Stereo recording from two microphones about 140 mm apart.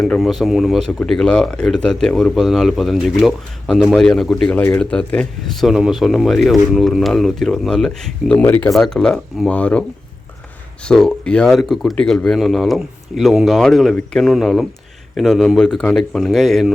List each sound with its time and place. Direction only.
0.0 s speech: centre (ahead or behind)
5.6 s speech: centre (ahead or behind)
10.8 s speech: 5° left (ahead or behind)